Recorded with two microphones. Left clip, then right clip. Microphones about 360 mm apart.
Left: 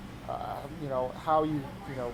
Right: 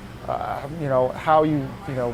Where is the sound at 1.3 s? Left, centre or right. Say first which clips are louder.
Right 9 dB; right.